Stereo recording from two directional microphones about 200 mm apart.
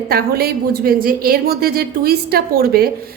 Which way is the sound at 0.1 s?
50° right (ahead or behind).